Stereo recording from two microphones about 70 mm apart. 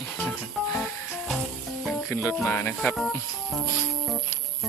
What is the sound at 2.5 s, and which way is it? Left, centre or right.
Speech, left.